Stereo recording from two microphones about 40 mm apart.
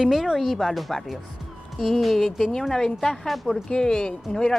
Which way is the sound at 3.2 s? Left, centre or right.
Centre.